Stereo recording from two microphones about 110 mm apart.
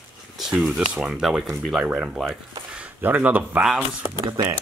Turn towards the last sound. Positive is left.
turn(degrees=-40)  # may be behind; listen again after turning